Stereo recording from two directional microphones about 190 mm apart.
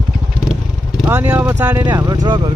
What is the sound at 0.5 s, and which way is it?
Vehicle, 5° right (ahead or behind).